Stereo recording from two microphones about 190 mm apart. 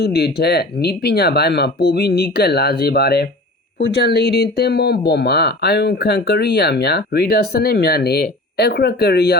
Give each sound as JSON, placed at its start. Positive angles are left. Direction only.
{"t": 0.0, "sound": "speech", "side_deg": 55}